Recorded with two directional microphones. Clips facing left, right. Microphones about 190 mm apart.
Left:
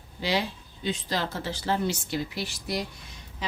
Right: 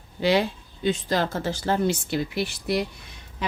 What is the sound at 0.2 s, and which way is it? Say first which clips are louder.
Speech: right 7 dB; 55° right (ahead or behind).